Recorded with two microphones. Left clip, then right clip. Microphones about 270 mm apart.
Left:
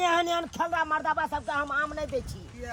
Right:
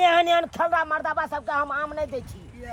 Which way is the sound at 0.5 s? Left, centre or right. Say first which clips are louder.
Right 4 dB; centre.